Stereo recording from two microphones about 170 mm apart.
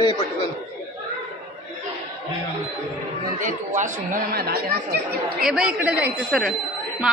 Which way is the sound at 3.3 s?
50° right (ahead or behind).